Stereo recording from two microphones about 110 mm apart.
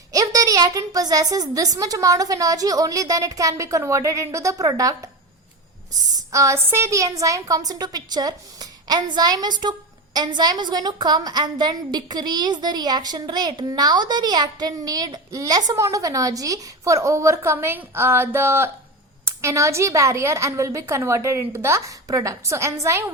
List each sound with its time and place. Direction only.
0.1 s a woman's voice: 30° right (ahead or behind)
6.3 s a woman's voice: 30° right (ahead or behind)